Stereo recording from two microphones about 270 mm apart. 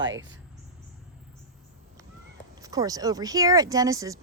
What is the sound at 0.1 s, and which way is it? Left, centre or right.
Speech, right.